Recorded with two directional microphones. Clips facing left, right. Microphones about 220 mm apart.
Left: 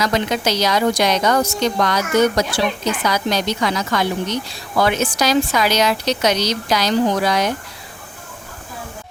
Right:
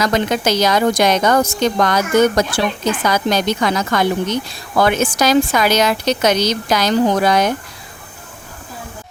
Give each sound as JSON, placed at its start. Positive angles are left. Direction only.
{"t": 0.0, "sound": "a woman's voice", "side_deg": -50}